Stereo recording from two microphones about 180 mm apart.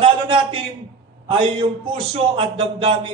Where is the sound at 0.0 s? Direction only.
30° right (ahead or behind).